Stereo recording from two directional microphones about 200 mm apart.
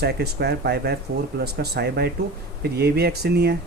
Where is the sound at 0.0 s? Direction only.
55° right (ahead or behind).